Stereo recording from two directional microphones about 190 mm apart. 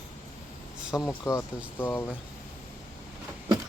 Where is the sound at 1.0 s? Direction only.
15° left (ahead or behind).